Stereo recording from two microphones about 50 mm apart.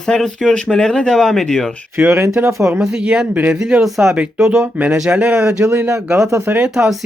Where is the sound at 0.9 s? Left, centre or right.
Centre.